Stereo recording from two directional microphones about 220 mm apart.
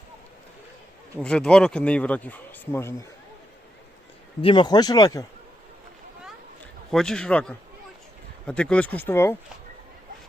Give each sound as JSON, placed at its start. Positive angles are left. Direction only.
{"t": 1.1, "sound": "speech", "side_deg": 5}
{"t": 4.4, "sound": "speech", "side_deg": 20}
{"t": 6.9, "sound": "speech", "side_deg": 0}